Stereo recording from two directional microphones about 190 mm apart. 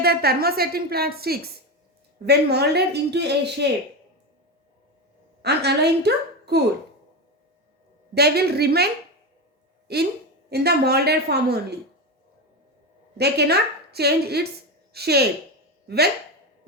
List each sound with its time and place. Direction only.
0.0 s speech: 55° right (ahead or behind)
5.4 s a woman's voice: 60° right (ahead or behind)
8.1 s speech: 55° right (ahead or behind)
9.9 s speech: 60° right (ahead or behind)
13.1 s speech: 60° right (ahead or behind)